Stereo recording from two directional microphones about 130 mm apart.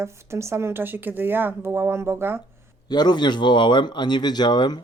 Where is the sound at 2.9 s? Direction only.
35° left (ahead or behind).